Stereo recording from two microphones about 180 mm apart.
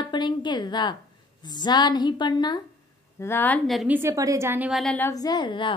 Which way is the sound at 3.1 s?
15° left (ahead or behind).